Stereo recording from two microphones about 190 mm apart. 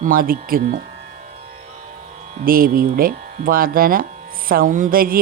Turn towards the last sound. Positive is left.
turn(degrees=-50)  # may be behind; listen again after turning